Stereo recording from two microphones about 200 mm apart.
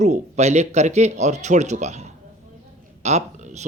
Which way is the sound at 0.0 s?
35° right (ahead or behind).